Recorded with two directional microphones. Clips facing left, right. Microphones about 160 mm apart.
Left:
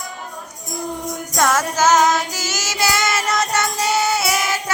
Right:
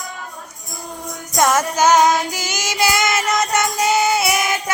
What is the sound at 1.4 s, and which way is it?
Child singing, 15° right (ahead or behind).